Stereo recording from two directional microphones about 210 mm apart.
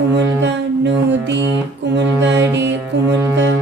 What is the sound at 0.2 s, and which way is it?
Music, 55° right (ahead or behind).